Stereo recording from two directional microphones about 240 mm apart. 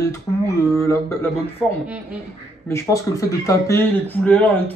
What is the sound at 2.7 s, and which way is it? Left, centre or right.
Speech, centre.